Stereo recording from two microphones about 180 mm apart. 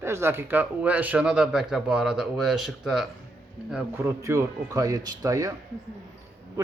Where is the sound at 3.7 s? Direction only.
15° right (ahead or behind).